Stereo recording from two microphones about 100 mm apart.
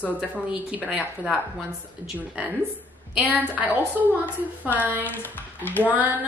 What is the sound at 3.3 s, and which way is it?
Speech, 15° right (ahead or behind).